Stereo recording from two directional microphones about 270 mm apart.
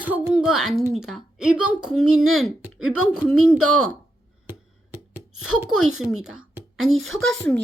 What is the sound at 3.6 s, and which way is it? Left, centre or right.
Speech, right.